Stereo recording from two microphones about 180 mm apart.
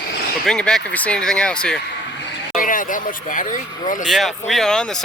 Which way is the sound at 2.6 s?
50° left (ahead or behind).